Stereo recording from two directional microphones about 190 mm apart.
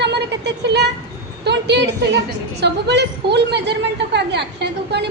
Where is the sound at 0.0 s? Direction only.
65° right (ahead or behind).